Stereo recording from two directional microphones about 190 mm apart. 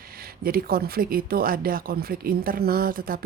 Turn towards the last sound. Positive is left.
turn(degrees=-50)  # may be behind; listen again after turning